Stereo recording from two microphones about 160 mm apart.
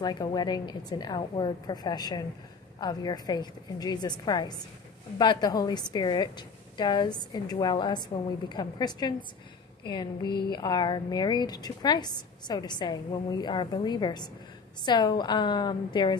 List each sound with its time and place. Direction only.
0.0 s a woman's voice: 25° left (ahead or behind)